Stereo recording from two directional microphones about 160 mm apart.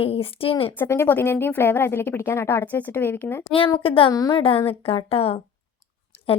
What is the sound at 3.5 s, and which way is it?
Speech, 35° left (ahead or behind).